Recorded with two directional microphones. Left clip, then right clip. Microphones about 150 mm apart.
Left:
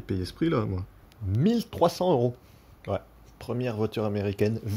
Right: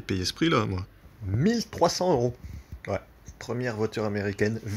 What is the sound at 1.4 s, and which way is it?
Speech, 35° left (ahead or behind).